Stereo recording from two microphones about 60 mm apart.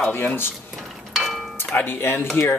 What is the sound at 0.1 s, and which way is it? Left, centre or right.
Speech, left.